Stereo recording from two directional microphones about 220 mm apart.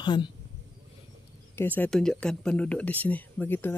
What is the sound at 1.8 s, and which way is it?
Speech, 5° left (ahead or behind).